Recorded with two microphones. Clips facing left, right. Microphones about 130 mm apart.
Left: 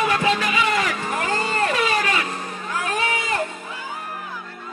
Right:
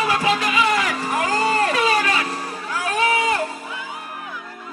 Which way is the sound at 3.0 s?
35° right (ahead or behind).